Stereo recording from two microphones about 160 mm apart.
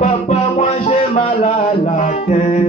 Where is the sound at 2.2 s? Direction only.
45° left (ahead or behind).